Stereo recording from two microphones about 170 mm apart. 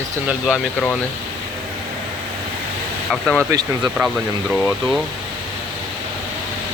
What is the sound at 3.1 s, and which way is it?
Speech, 5° left (ahead or behind).